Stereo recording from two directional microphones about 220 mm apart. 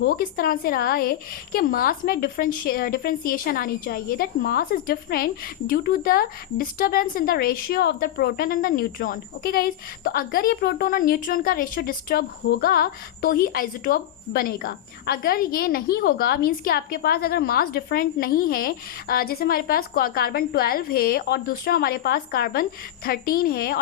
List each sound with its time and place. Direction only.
0.0 s a woman's voice: 40° left (ahead or behind)